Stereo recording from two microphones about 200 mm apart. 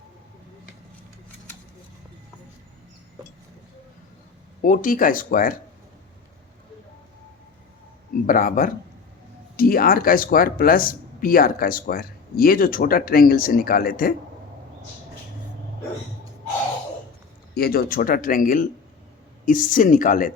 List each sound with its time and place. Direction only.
4.6 s speech: 40° left (ahead or behind)
8.3 s speech: 45° left (ahead or behind)
17.5 s speech: 50° left (ahead or behind)